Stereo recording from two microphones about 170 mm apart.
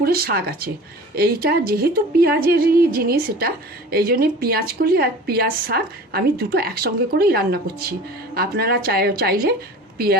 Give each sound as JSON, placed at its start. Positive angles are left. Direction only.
{"t": 0.0, "sound": "speech", "side_deg": -60}